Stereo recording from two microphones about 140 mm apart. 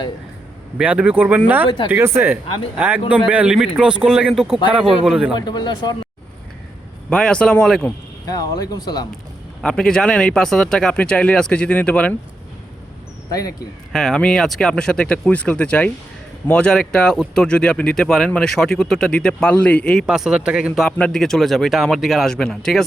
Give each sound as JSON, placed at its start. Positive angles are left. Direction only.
{"t": 0.8, "sound": "a man's voice", "side_deg": -10}
{"t": 5.3, "sound": "speech", "side_deg": 30}
{"t": 7.1, "sound": "speech", "side_deg": 5}
{"t": 8.3, "sound": "speech", "side_deg": 25}
{"t": 9.6, "sound": "speech", "side_deg": 5}
{"t": 13.9, "sound": "speech", "side_deg": 5}